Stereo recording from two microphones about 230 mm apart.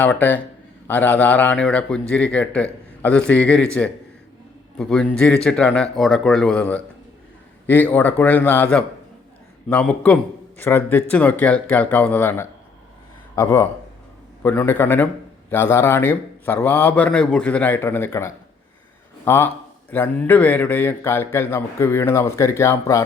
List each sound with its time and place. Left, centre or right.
0.0 s a man's voice: centre